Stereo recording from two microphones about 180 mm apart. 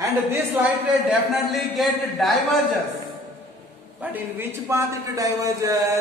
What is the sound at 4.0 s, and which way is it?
A man's voice, 10° right (ahead or behind).